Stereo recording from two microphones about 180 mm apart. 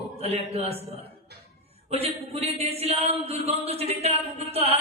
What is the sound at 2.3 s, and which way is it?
Speech, 35° right (ahead or behind).